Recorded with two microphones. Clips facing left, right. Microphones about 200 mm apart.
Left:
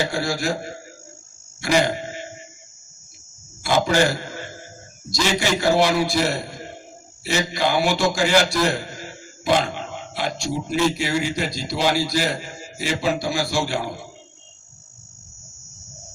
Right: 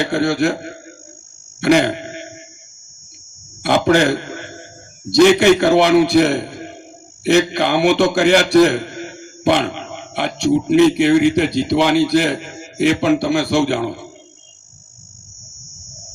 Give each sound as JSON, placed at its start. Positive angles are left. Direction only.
{"t": 0.0, "sound": "a man's voice", "side_deg": -60}
{"t": 3.6, "sound": "a man's voice", "side_deg": -60}
{"t": 9.4, "sound": "a man's voice", "side_deg": -60}
{"t": 15.5, "sound": "cricket", "side_deg": -45}